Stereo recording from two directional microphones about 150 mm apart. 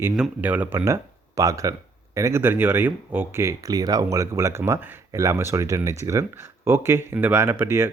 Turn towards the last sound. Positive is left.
turn(degrees=-15)  # may be behind; listen again after turning